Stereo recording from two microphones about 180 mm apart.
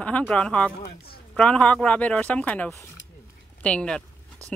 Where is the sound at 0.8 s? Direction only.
60° left (ahead or behind).